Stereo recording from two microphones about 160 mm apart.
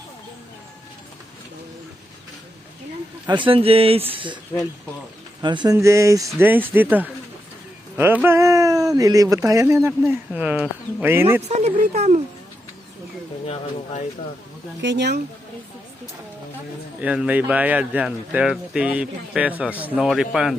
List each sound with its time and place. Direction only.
3.2 s speech: 30° right (ahead or behind)
5.4 s speech: 30° right (ahead or behind)
11.4 s speech: 45° right (ahead or behind)
13.5 s speech: 45° left (ahead or behind)
14.8 s speech: 90° right
17.0 s speech: 10° right (ahead or behind)